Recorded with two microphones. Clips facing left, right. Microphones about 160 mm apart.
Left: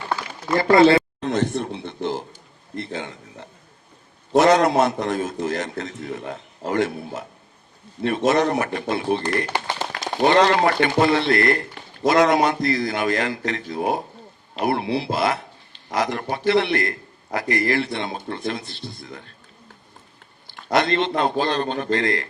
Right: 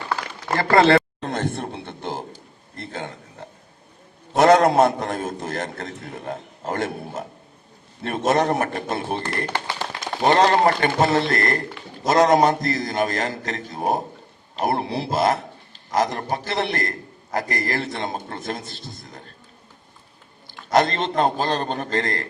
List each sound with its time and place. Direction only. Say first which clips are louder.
0.5 s speech: left 2 dB; 50° right (ahead or behind)
2.3 s a sound: left 7 dB; 45° right (ahead or behind)
4.4 s speech: right 1 dB; 50° right (ahead or behind)
9.5 s speech: left 1 dB; 15° left (ahead or behind)
10.0 s a man's voice: left 1 dB; 40° right (ahead or behind)
20.5 s a man's voice: right 1 dB; 40° right (ahead or behind)